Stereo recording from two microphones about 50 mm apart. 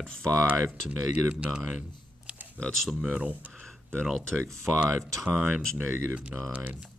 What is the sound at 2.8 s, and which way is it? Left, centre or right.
Speech, centre.